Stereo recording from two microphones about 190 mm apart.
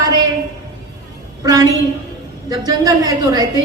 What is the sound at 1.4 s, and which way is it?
Speech, 20° right (ahead or behind).